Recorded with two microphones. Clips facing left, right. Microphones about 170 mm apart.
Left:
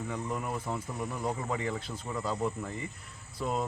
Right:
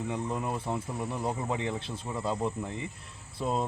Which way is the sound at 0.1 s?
25° right (ahead or behind).